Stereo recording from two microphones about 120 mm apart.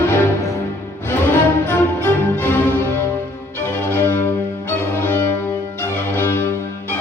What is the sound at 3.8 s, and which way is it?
Music, 15° left (ahead or behind).